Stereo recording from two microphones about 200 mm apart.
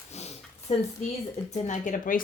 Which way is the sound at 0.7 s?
35° left (ahead or behind).